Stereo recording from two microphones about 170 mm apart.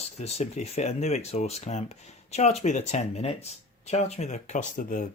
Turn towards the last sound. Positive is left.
turn(degrees=50)  # may be behind; listen again after turning